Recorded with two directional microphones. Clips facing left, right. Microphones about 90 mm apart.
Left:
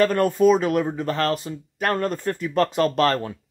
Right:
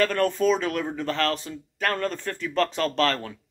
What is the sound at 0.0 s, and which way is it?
Speech, 15° left (ahead or behind).